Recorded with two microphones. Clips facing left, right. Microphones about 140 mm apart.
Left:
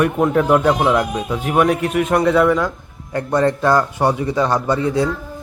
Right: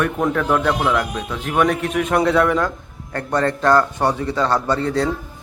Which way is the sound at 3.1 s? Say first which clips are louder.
Left 3 dB; 15° left (ahead or behind).